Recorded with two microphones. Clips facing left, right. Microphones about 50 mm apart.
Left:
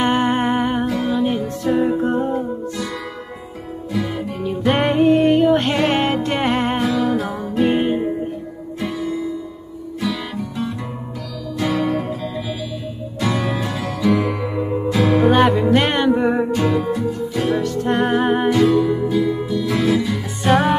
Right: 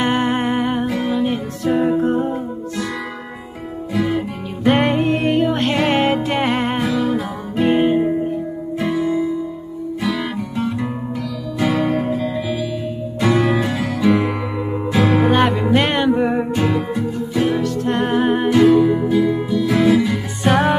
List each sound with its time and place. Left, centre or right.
0.0 s music: centre
0.8 s music: right
1.1 s music: centre
3.9 s music: centre
4.6 s music: centre
8.9 s music: right
11.7 s music: centre
13.2 s music: right
15.1 s music: centre
18.7 s music: centre
20.4 s music: centre